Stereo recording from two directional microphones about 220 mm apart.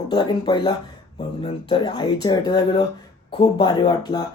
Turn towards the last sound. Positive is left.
turn(degrees=20)  # may be behind; listen again after turning